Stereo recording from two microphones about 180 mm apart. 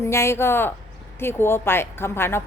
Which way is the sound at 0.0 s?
15° left (ahead or behind).